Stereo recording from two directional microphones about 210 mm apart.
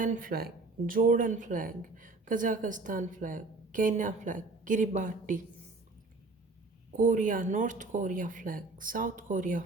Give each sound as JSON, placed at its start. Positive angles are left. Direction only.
{"t": 0.0, "sound": "speech", "side_deg": -40}
{"t": 6.9, "sound": "speech", "side_deg": -40}